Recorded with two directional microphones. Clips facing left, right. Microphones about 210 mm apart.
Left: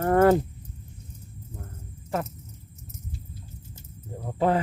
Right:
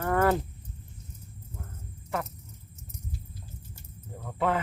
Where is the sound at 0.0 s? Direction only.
40° left (ahead or behind).